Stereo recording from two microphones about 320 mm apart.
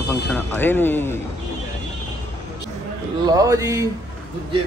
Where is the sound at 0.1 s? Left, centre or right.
Centre.